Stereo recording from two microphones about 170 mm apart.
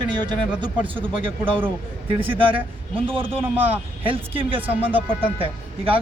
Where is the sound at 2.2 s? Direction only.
30° right (ahead or behind).